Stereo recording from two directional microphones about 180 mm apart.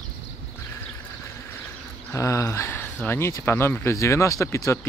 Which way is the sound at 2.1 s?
20° left (ahead or behind).